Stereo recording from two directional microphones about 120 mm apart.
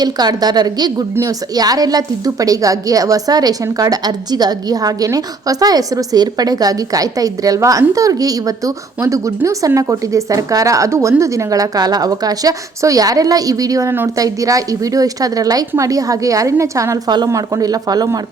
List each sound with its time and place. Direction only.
0.0 s a woman's voice: 35° right (ahead or behind)